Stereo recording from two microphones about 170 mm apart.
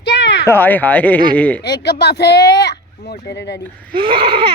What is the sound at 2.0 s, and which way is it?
Speech, 80° left.